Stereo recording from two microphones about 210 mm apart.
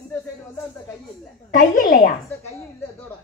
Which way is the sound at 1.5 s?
40° left (ahead or behind).